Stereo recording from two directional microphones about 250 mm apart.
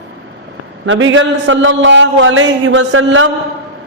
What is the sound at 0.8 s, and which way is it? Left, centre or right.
A man's voice, right.